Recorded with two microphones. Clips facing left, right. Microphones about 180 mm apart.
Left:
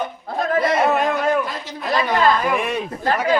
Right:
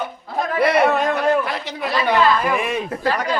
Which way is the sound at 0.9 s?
Centre (ahead or behind).